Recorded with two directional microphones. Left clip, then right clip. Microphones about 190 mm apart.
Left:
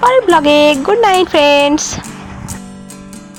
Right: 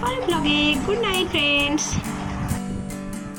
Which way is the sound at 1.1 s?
25° left (ahead or behind).